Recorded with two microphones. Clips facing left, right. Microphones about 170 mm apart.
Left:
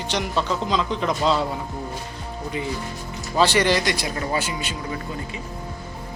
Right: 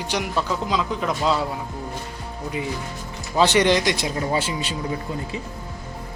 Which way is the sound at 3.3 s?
15° right (ahead or behind).